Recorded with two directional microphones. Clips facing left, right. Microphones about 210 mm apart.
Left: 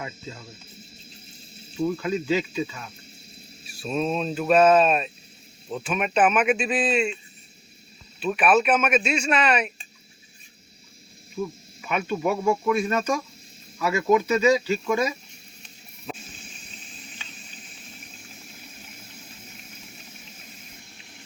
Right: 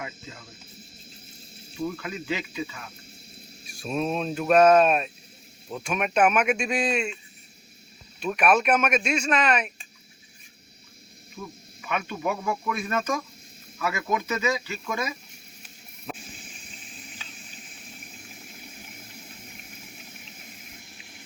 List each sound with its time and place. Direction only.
0.0 s speech: 30° left (ahead or behind)
2.0 s speech: 25° left (ahead or behind)
3.8 s speech: 5° right (ahead or behind)
8.2 s speech: 5° left (ahead or behind)
11.8 s speech: 30° left (ahead or behind)